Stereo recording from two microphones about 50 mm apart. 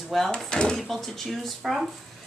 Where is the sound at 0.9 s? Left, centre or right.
Centre.